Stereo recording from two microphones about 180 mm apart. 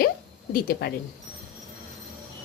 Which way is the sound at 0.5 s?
55° left (ahead or behind).